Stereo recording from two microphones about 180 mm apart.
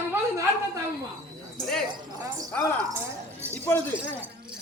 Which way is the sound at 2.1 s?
20° right (ahead or behind).